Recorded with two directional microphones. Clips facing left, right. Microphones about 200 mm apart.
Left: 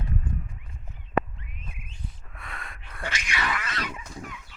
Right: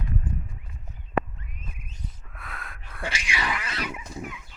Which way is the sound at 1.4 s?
40° right (ahead or behind).